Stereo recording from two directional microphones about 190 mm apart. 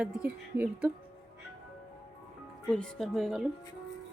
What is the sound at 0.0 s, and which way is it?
Speech, 5° right (ahead or behind).